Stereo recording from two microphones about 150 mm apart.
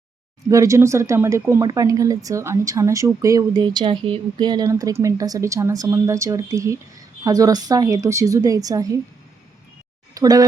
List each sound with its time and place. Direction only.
0.4 s speech: 20° right (ahead or behind)
10.2 s speech: 25° right (ahead or behind)